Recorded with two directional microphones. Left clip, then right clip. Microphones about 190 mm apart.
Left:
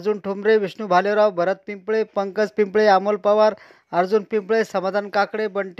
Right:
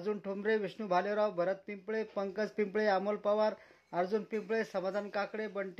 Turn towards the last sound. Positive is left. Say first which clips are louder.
# left 15 dB
turn(degrees=35)  # may be behind; listen again after turning